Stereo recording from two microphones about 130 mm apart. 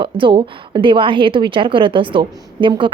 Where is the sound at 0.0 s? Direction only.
40° right (ahead or behind).